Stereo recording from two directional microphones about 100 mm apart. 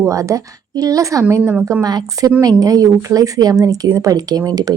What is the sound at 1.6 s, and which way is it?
Speech, 35° right (ahead or behind).